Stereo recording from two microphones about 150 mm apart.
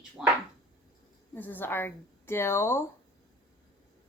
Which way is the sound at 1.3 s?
10° left (ahead or behind).